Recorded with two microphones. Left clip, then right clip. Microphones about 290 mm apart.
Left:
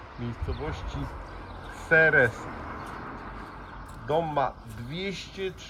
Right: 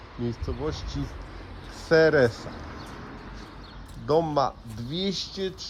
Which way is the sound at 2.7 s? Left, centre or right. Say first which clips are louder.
Left 3 dB; left.